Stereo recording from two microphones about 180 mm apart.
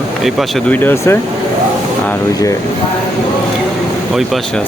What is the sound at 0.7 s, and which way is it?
Speech, 10° left (ahead or behind).